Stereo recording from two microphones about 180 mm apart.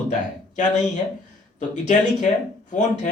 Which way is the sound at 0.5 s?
40° left (ahead or behind).